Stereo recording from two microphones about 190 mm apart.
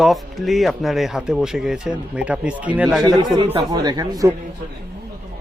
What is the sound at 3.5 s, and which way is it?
Speech, 20° right (ahead or behind).